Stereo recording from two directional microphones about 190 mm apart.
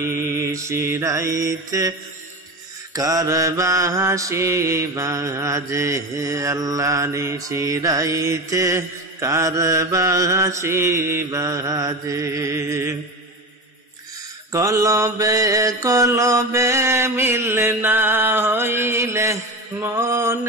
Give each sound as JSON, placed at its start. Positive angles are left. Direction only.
{"t": 0.3, "sound": "mantra", "side_deg": -15}
{"t": 14.5, "sound": "mantra", "side_deg": -15}